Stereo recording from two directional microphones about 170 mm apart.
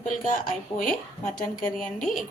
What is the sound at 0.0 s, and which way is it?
Speech, 50° left (ahead or behind).